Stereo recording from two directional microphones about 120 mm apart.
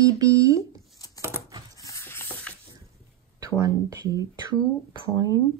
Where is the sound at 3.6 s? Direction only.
25° right (ahead or behind).